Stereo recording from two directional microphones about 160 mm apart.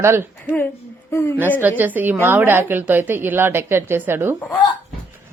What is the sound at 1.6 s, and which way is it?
A woman's voice, 10° right (ahead or behind).